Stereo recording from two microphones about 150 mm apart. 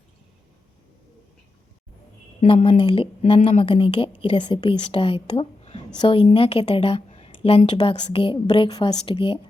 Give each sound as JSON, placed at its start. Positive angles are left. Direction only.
{"t": 2.6, "sound": "a woman's voice", "side_deg": 40}